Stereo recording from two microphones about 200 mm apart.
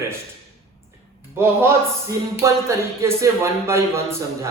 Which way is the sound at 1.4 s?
15° right (ahead or behind).